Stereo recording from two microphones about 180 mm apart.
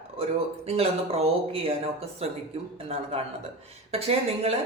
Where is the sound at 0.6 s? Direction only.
35° right (ahead or behind).